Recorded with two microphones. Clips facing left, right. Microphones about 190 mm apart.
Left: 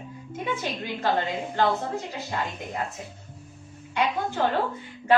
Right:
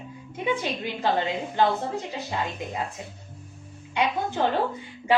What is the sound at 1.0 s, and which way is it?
Speech, 15° right (ahead or behind).